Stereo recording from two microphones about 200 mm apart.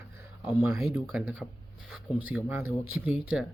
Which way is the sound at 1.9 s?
5° right (ahead or behind).